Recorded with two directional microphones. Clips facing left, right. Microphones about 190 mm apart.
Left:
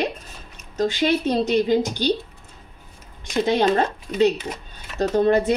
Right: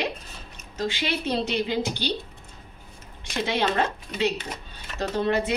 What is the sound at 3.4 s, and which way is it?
A woman's voice, 45° left (ahead or behind).